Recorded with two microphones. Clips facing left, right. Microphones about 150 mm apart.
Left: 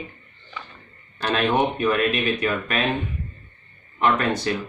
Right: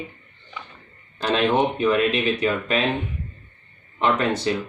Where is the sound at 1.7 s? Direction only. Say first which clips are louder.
Right 2 dB; 25° right (ahead or behind).